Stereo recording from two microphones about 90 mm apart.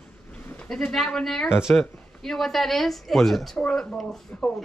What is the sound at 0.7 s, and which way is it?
Speech, 5° left (ahead or behind).